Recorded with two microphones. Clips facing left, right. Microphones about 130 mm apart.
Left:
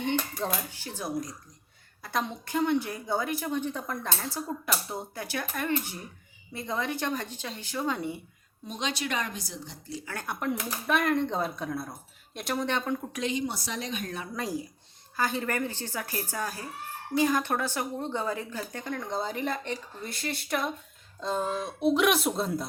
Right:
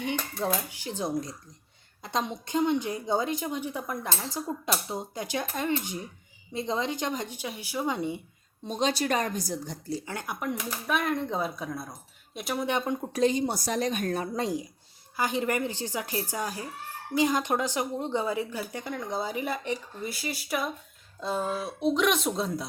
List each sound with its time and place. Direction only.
0.0 s a woman's voice: 10° right (ahead or behind)
0.9 s a woman's voice: 20° right (ahead or behind)
8.6 s a woman's voice: 35° right (ahead or behind)
10.1 s a woman's voice: 15° right (ahead or behind)
10.4 s speech: 5° left (ahead or behind); by 13.1 s 15° right (ahead or behind)
13.1 s a woman's voice: 35° right (ahead or behind)
14.3 s a woman's voice: 20° right (ahead or behind); by 22.6 s centre (ahead or behind)